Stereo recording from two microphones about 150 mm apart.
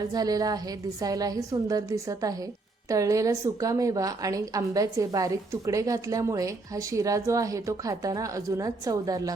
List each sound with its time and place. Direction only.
0.1 s a woman's voice: 25° right (ahead or behind)